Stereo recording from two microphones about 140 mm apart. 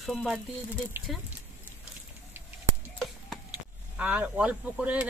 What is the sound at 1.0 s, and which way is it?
Speech, 15° right (ahead or behind).